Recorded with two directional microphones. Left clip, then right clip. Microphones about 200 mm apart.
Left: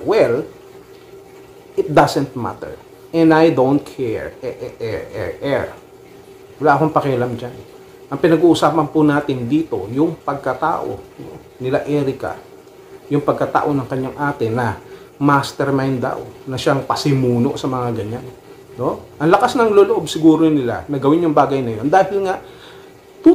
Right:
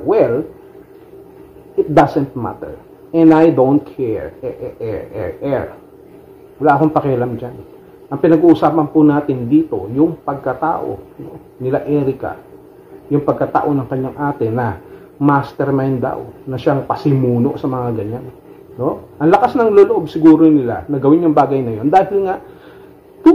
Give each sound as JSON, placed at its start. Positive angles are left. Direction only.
{"t": 0.0, "sound": "speech", "side_deg": 10}
{"t": 2.0, "sound": "speech", "side_deg": 15}